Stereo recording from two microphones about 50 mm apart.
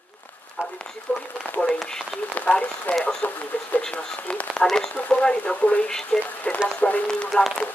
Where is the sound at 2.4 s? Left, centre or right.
Left.